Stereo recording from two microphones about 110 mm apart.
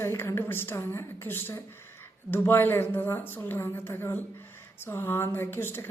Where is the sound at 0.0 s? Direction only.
25° left (ahead or behind).